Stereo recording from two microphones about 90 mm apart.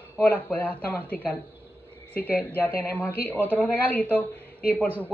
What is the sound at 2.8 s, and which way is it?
Speech, 20° left (ahead or behind).